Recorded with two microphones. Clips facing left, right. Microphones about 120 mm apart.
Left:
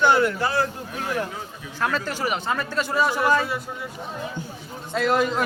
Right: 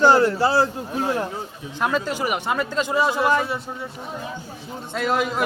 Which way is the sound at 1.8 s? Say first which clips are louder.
Right 2 dB; 15° right (ahead or behind).